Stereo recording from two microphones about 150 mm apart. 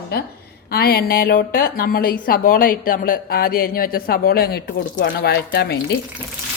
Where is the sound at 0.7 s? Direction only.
90° left.